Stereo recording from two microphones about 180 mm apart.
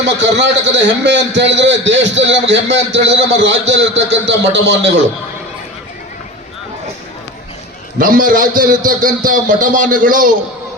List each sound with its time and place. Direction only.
0.0 s a man's voice: 80° right
7.9 s a man's voice: 50° right (ahead or behind)